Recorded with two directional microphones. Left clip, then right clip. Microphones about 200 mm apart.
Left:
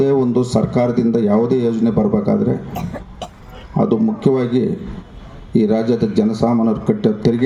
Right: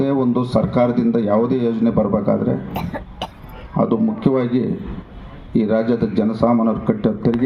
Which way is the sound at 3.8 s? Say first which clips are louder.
Left 2 dB; 80° left.